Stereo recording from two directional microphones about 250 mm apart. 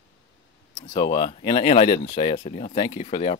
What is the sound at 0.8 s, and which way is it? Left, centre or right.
Speech, centre.